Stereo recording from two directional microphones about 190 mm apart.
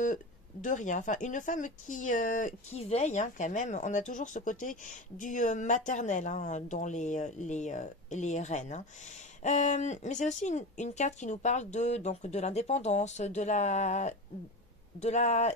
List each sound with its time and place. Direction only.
0.0 s speech: 45° left (ahead or behind)